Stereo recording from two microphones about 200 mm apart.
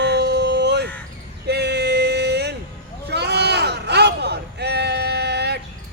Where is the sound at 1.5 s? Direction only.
55° right (ahead or behind).